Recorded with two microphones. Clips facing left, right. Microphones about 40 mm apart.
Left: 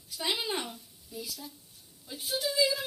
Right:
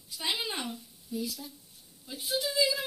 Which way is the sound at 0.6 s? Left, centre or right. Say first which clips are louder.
Right 6 dB; centre.